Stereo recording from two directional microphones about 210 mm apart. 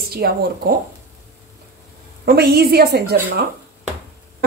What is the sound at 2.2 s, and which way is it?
Speech, 50° right (ahead or behind).